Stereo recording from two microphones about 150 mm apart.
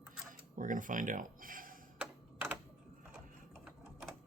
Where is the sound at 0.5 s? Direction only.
60° right (ahead or behind).